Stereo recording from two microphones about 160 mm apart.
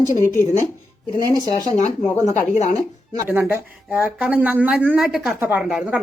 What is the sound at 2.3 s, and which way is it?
Speech, 45° left (ahead or behind).